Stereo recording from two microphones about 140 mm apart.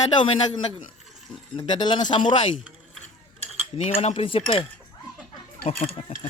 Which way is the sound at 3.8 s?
45° left (ahead or behind).